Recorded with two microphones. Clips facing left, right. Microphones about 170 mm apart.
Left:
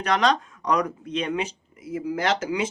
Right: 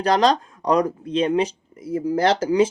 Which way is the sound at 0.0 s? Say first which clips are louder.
Right 4 dB; 35° right (ahead or behind).